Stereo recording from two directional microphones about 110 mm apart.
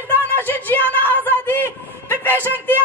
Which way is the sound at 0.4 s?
20° left (ahead or behind).